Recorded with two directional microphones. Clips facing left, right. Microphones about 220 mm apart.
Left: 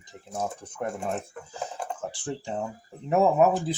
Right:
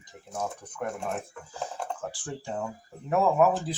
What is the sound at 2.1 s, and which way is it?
Speech, 25° left (ahead or behind).